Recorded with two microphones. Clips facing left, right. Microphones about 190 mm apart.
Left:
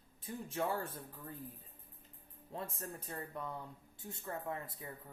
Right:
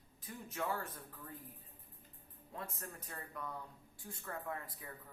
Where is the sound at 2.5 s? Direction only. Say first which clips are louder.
Left 4 dB; 30° left (ahead or behind).